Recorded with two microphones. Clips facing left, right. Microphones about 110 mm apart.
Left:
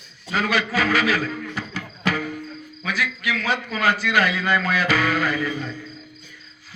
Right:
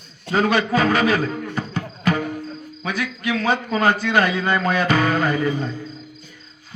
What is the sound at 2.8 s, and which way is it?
A man's voice, 30° right (ahead or behind).